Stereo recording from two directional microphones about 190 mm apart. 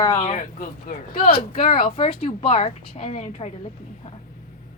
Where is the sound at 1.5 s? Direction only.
30° left (ahead or behind).